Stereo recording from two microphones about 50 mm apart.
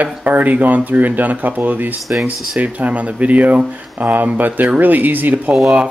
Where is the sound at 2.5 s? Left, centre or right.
Right.